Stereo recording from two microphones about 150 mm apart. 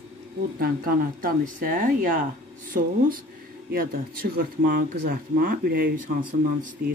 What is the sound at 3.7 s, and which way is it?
Speech, 80° right.